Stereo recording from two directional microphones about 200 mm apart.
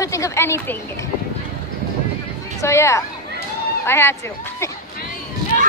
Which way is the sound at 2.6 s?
15° left (ahead or behind).